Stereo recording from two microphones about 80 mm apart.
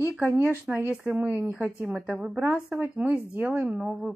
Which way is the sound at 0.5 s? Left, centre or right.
Centre.